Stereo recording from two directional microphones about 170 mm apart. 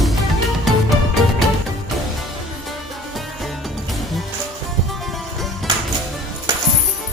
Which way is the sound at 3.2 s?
Centre (ahead or behind).